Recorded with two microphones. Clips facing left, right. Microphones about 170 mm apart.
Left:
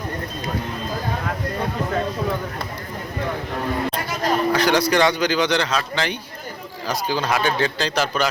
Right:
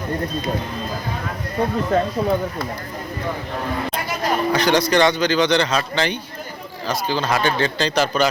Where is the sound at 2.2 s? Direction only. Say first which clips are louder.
Right 4 dB; 30° right (ahead or behind).